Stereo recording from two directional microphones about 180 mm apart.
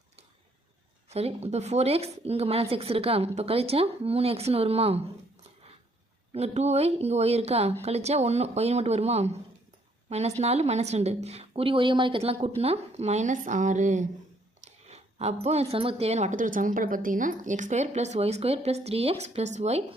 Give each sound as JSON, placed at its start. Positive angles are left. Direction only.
{"t": 1.1, "sound": "speech", "side_deg": -35}
{"t": 6.3, "sound": "speech", "side_deg": -35}